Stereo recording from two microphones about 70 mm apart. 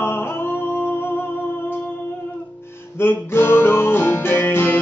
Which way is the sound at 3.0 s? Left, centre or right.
Left.